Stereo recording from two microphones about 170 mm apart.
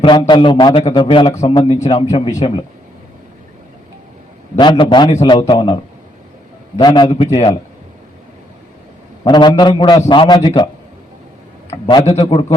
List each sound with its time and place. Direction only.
0.0 s a man's voice: 25° left (ahead or behind)
1.3 s a man's voice: 40° left (ahead or behind)
1.5 s a man's voice: 30° left (ahead or behind)
4.5 s a man's voice: 30° left (ahead or behind)
9.2 s a man's voice: 25° left (ahead or behind)
11.9 s a man's voice: 30° left (ahead or behind)